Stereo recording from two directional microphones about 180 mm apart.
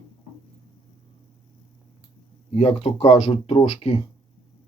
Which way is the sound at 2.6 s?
35° left (ahead or behind).